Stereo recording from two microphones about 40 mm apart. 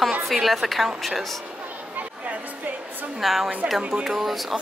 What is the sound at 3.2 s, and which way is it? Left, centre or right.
A woman's voice, centre.